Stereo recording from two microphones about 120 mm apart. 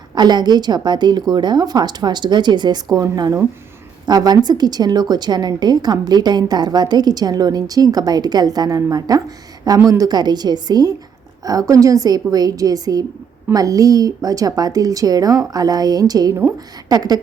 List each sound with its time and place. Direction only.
0.1 s a woman's voice: 35° right (ahead or behind)